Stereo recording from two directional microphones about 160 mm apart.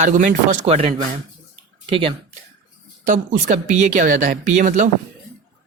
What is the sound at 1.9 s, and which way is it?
Speech, 35° right (ahead or behind).